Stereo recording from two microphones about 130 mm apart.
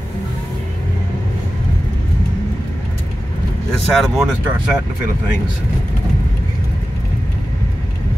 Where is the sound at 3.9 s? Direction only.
5° left (ahead or behind).